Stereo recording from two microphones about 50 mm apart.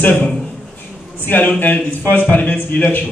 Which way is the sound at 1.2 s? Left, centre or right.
Left.